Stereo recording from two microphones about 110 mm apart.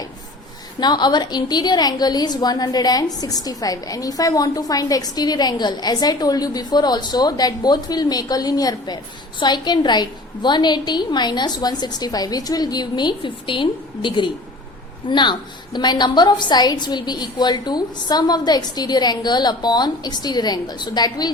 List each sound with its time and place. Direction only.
0.8 s a woman's voice: 40° left (ahead or behind)